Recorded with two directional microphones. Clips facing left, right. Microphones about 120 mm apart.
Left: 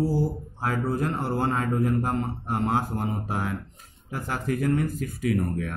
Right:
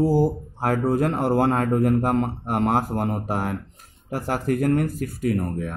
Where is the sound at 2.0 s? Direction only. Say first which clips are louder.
Right 5 dB; 75° right (ahead or behind); by 5.5 s 45° right (ahead or behind).